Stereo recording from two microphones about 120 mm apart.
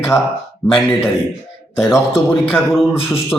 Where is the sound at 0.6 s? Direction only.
5° left (ahead or behind).